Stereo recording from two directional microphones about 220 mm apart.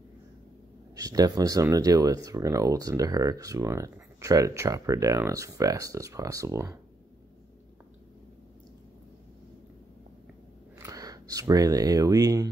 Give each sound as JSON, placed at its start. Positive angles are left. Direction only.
{"t": 0.9, "sound": "speech", "side_deg": -15}
{"t": 10.8, "sound": "speech", "side_deg": -15}